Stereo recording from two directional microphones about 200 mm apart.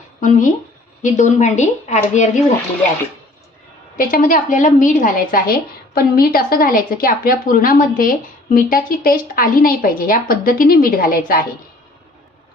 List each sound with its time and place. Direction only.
0.2 s a woman's voice: 40° left (ahead or behind)
3.9 s a woman's voice: 45° left (ahead or behind)